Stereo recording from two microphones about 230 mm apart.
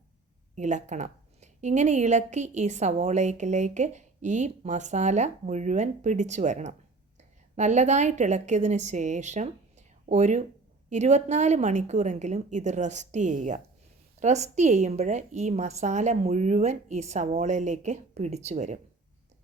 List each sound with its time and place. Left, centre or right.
0.5 s a woman's voice: right